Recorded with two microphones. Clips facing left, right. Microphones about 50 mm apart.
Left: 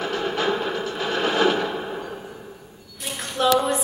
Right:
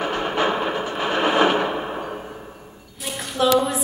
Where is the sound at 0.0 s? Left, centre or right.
Right.